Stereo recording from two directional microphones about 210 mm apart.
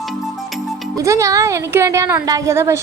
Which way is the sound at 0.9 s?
15° right (ahead or behind).